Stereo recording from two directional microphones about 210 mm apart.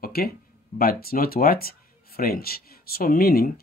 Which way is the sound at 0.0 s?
45° left (ahead or behind).